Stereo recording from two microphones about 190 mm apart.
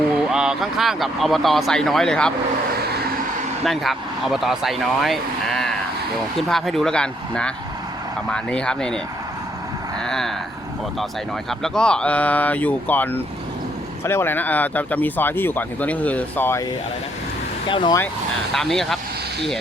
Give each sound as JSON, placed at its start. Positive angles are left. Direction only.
{"t": 0.3, "sound": "speech", "side_deg": -5}
{"t": 2.7, "sound": "vehicle", "side_deg": -55}
{"t": 3.6, "sound": "speech", "side_deg": 0}
{"t": 10.0, "sound": "speech", "side_deg": 5}
{"t": 11.6, "sound": "speech", "side_deg": 5}
{"t": 17.7, "sound": "speech", "side_deg": 25}
{"t": 18.5, "sound": "speech", "side_deg": 0}